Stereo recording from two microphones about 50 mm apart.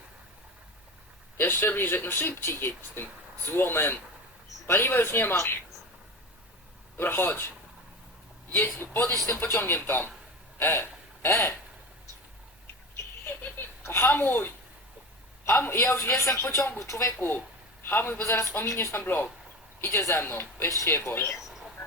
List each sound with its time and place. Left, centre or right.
1.4 s speech: left
6.9 s speech: left
8.5 s speech: left
10.6 s a sound: left
11.3 s speech: left
13.2 s a sound: left
13.8 s a sound: left
14.1 s a man's voice: left
17.8 s speech: left
19.8 s speech: left
20.7 s a man's voice: left